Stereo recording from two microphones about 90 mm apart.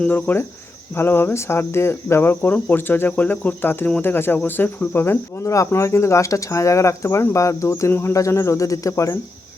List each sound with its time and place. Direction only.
0.0 s cricket: 20° left (ahead or behind)
4.4 s speech: 20° left (ahead or behind); by 9.1 s 40° left (ahead or behind)